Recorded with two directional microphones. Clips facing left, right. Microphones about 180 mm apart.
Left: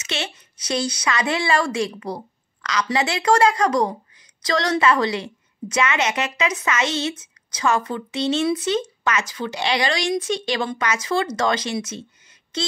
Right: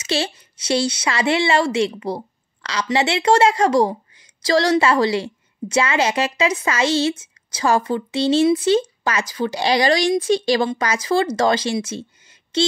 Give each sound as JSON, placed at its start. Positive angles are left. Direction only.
{"t": 0.0, "sound": "a woman's voice", "side_deg": -30}